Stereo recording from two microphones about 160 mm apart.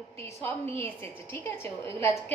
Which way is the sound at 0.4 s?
15° left (ahead or behind).